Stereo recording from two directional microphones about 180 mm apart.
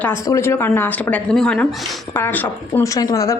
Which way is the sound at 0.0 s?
15° left (ahead or behind).